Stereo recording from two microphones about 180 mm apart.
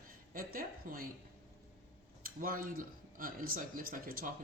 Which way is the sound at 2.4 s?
50° right (ahead or behind).